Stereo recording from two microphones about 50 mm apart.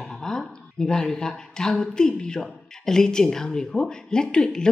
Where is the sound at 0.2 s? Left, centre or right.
Centre.